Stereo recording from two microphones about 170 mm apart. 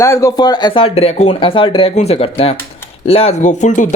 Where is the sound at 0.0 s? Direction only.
15° left (ahead or behind).